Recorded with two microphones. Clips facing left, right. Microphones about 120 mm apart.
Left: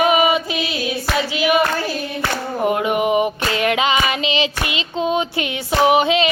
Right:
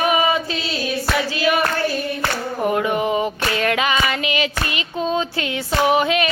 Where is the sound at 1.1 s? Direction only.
20° left (ahead or behind).